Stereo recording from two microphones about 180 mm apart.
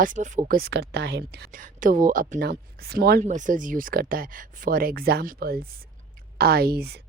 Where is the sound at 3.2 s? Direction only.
45° right (ahead or behind).